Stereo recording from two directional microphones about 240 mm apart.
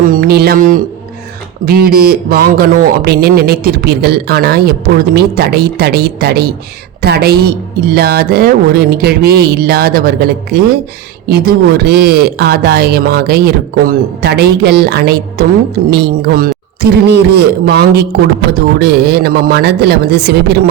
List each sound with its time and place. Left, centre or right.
0.0 s a man's voice: right